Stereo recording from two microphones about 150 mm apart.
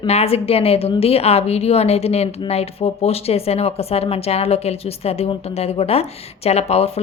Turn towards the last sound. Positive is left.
turn(degrees=45)  # may be behind; listen again after turning